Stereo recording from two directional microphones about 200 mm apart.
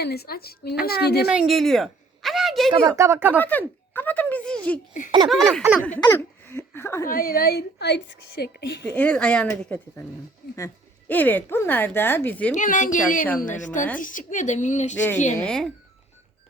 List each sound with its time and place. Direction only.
0.0 s a woman's voice: 50° left (ahead or behind)
1.3 s a sound: centre (ahead or behind)
2.8 s speech: 15° right (ahead or behind)
3.3 s speech: 10° left (ahead or behind)
5.3 s baby laughter: centre (ahead or behind)
6.0 s speech: 15° left (ahead or behind)
7.1 s a woman's voice: 50° left (ahead or behind)
9.0 s speech: 5° left (ahead or behind)
11.1 s speech: 10° left (ahead or behind)
12.5 s a woman's voice: 40° left (ahead or behind)
14.9 s speech: 10° left (ahead or behind)
15.4 s baby laughter: 5° left (ahead or behind)